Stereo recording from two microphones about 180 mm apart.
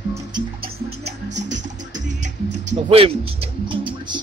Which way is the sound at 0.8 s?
70° right (ahead or behind).